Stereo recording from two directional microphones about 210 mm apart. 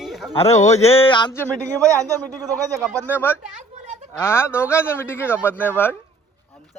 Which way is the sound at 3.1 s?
10° left (ahead or behind).